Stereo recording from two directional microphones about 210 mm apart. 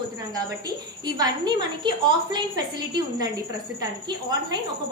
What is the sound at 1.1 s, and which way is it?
A woman's voice, 20° right (ahead or behind).